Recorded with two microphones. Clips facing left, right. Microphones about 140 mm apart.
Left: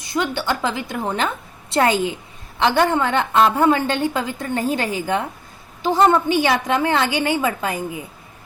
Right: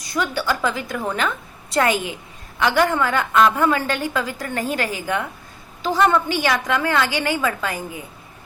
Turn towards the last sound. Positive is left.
turn(degrees=25)  # may be behind; listen again after turning